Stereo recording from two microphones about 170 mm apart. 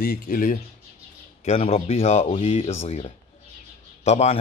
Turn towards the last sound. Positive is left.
turn(degrees=40)  # may be behind; listen again after turning